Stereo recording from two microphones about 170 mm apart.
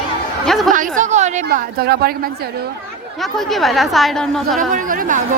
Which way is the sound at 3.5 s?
Centre (ahead or behind).